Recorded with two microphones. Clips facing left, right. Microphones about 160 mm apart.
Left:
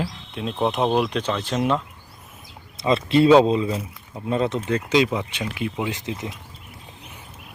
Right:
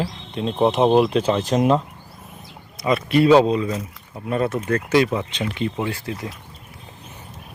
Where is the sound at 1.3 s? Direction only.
40° right (ahead or behind).